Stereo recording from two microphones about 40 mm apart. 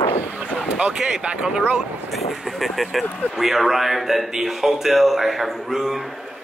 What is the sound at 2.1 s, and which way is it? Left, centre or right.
A man's voice, centre.